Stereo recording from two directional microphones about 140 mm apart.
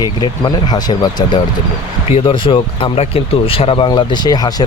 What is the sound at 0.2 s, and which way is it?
Speech, 30° left (ahead or behind).